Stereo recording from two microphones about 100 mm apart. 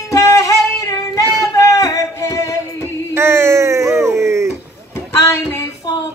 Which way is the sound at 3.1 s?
25° right (ahead or behind).